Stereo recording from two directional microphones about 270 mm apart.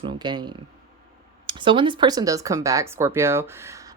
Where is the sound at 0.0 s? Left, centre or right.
Centre.